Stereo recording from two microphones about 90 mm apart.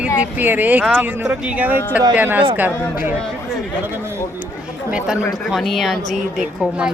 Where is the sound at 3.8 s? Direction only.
30° right (ahead or behind).